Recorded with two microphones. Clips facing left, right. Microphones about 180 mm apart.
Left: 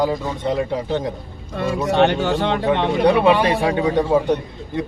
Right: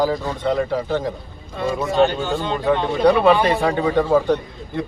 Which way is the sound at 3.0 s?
15° left (ahead or behind).